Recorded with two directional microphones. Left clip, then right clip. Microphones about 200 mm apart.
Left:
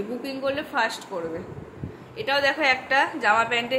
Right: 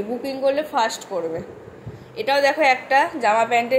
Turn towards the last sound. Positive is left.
turn(degrees=-10)  # may be behind; listen again after turning